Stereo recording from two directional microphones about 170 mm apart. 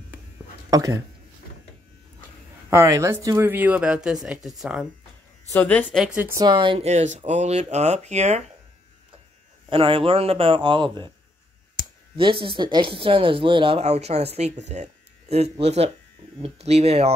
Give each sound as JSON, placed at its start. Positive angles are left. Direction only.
{"t": 0.7, "sound": "speech", "side_deg": -20}
{"t": 2.7, "sound": "speech", "side_deg": -15}
{"t": 5.5, "sound": "speech", "side_deg": 10}
{"t": 5.9, "sound": "speech", "side_deg": -5}
{"t": 6.4, "sound": "speech", "side_deg": -30}
{"t": 6.9, "sound": "speech", "side_deg": -40}
{"t": 9.7, "sound": "speech", "side_deg": -30}
{"t": 12.2, "sound": "speech", "side_deg": -30}